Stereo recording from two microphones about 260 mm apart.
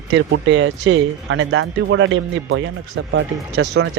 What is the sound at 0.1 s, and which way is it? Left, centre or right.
Speech, right.